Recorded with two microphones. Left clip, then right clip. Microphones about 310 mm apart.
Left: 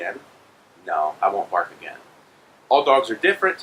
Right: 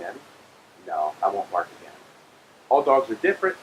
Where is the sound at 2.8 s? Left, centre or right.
Centre.